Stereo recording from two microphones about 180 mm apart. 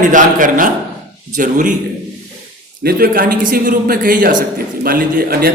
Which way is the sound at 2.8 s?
55° right (ahead or behind).